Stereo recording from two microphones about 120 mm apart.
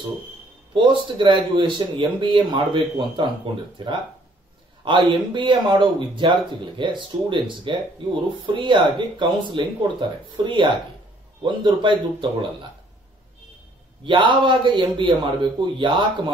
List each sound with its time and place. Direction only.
0.7 s speech: 45° right (ahead or behind)
14.0 s speech: 40° right (ahead or behind)